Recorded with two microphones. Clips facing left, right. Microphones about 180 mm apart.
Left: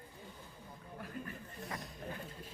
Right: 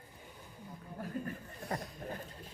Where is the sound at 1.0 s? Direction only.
40° right (ahead or behind).